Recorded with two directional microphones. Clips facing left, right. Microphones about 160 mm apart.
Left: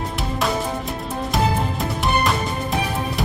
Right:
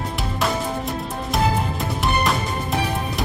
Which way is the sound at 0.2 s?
Centre (ahead or behind).